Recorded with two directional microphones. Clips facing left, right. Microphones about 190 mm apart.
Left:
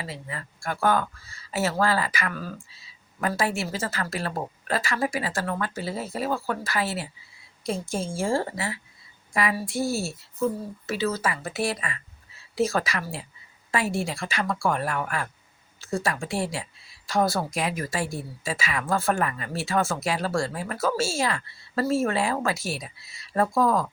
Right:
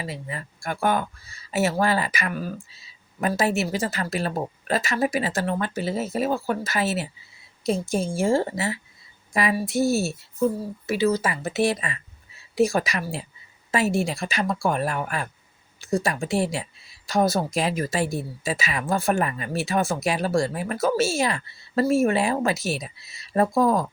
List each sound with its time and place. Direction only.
0.0 s speech: 20° right (ahead or behind)